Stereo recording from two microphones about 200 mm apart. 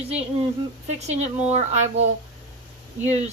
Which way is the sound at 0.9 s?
35° right (ahead or behind).